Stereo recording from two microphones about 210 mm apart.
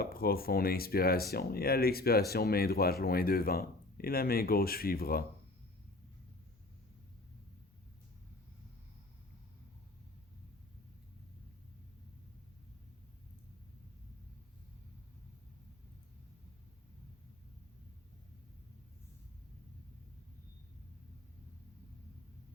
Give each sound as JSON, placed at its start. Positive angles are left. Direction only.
{"t": 0.0, "sound": "speech", "side_deg": 45}